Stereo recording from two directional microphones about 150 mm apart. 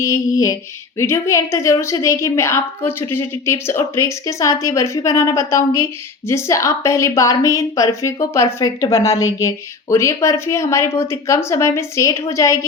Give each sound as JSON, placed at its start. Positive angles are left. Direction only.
{"t": 0.0, "sound": "a woman's voice", "side_deg": 20}